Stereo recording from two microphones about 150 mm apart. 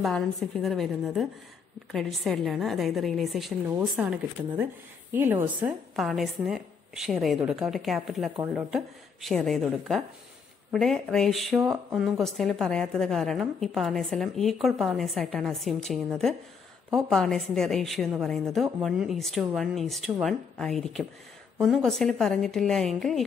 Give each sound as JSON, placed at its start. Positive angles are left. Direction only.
{"t": 0.0, "sound": "a woman's voice", "side_deg": 0}
{"t": 11.6, "sound": "speech", "side_deg": -10}
{"t": 12.2, "sound": "a woman's voice", "side_deg": 0}